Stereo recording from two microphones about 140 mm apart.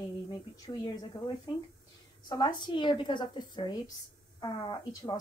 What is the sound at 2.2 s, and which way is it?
A woman's voice, 30° left (ahead or behind).